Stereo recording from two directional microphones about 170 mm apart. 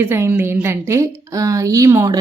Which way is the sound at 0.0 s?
10° right (ahead or behind).